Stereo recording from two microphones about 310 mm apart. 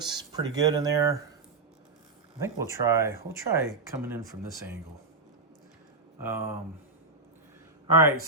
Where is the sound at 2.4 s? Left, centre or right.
Centre.